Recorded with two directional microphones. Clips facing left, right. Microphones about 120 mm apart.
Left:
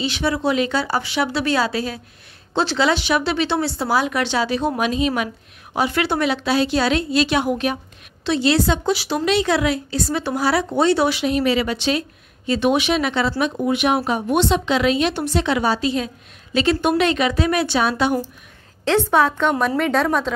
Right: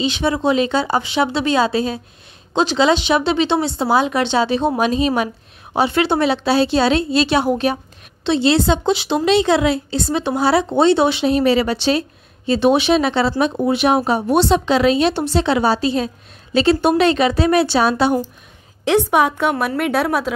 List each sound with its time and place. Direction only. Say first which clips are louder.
0.0 s speech: right 3 dB; 20° right (ahead or behind)
18.9 s a woman's voice: right 2 dB; 15° right (ahead or behind)